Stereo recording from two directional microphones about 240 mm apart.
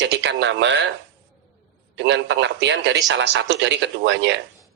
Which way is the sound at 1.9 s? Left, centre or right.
Right.